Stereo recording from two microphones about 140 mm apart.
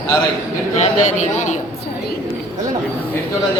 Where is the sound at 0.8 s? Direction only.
55° left (ahead or behind).